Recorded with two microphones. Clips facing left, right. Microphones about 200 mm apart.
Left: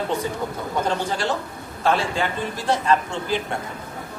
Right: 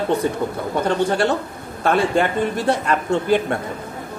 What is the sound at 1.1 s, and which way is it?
A woman's voice, 60° right (ahead or behind).